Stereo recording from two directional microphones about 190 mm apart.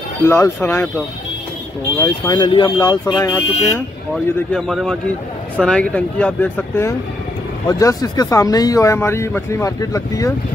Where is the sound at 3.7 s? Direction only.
5° left (ahead or behind).